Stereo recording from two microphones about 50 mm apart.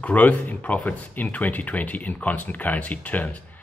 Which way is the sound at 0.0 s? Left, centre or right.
Left.